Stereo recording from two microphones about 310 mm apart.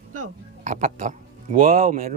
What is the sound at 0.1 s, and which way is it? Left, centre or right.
Speech, right.